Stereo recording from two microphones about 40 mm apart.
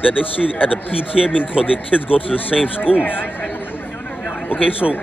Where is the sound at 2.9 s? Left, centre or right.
Left.